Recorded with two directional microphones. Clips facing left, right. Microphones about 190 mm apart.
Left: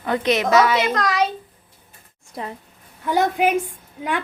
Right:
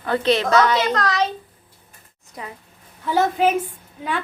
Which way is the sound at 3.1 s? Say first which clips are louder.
Even; 15° left (ahead or behind).